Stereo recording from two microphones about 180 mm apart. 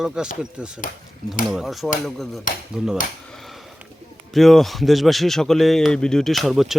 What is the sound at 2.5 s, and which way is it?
Speech, 45° left (ahead or behind).